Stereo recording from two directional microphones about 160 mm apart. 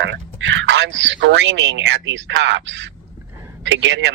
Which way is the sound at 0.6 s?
90° right.